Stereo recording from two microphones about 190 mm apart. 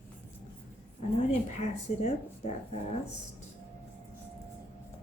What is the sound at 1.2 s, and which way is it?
A woman's voice, 35° left (ahead or behind).